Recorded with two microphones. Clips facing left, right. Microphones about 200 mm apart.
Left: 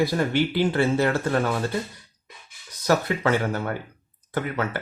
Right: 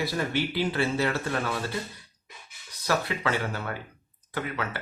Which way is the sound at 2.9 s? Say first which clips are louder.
Left 6 dB; 50° left (ahead or behind).